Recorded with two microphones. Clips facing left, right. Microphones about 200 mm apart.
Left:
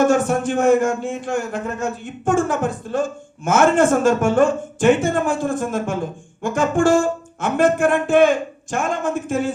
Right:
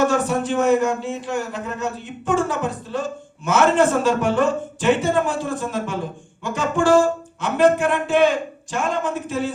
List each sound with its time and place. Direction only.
0.0 s a man's voice: 50° left (ahead or behind)